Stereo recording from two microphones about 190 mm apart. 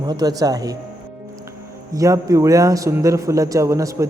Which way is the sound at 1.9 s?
15° right (ahead or behind).